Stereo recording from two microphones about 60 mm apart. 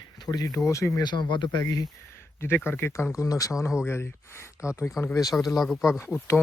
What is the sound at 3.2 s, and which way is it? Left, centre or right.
Speech, left.